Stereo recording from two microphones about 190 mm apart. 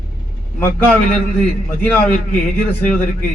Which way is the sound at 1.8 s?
10° left (ahead or behind).